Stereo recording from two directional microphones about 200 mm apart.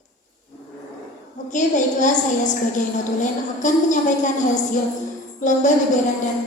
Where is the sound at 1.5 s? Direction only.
40° left (ahead or behind).